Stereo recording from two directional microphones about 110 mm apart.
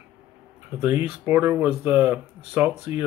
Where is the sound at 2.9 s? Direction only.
75° left (ahead or behind).